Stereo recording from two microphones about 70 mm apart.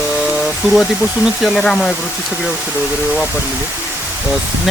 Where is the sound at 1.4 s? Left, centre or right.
Centre.